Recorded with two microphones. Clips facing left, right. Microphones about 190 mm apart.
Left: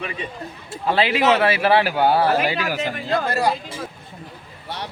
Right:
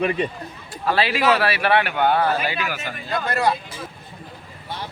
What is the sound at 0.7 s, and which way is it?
Speech, 20° left (ahead or behind).